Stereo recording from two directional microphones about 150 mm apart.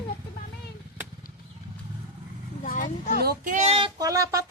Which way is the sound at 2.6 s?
60° left (ahead or behind).